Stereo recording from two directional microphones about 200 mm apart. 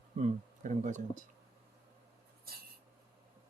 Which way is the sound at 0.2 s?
40° right (ahead or behind).